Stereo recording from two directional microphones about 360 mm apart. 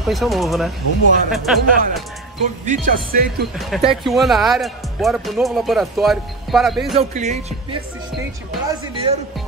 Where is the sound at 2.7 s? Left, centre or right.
Right.